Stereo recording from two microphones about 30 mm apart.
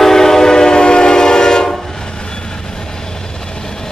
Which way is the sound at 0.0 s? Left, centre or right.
Centre.